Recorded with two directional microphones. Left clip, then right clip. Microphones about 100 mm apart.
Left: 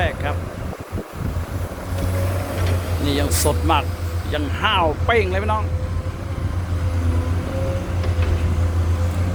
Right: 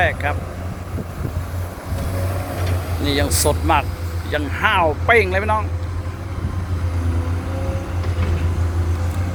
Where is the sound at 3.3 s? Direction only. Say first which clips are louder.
Right 1 dB; 20° left (ahead or behind).